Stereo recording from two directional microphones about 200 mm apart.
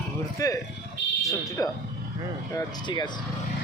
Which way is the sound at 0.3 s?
15° left (ahead or behind).